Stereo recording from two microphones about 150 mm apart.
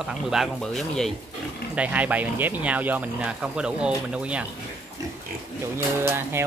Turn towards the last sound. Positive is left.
turn(degrees=-15)  # may be behind; listen again after turning